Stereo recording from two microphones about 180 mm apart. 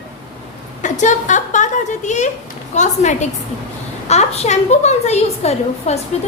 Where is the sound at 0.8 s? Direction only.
45° left (ahead or behind).